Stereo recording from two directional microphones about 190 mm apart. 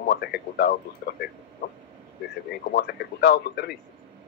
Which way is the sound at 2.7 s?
60° left (ahead or behind).